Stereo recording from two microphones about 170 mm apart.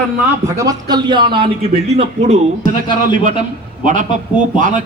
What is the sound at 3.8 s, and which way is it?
Speech, 50° right (ahead or behind).